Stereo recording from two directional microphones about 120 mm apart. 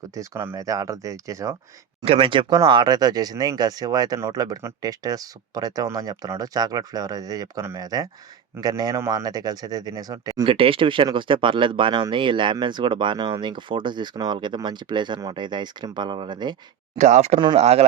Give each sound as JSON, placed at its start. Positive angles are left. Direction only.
{"t": 0.1, "sound": "speech", "side_deg": -25}
{"t": 2.1, "sound": "speech", "side_deg": -45}
{"t": 10.4, "sound": "speech", "side_deg": -50}
{"t": 17.0, "sound": "speech", "side_deg": -75}
{"t": 17.6, "sound": "speech", "side_deg": -60}